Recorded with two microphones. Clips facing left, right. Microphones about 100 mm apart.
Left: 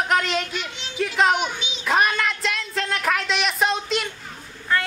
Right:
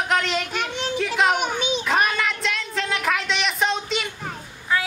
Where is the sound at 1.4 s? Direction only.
50° right (ahead or behind).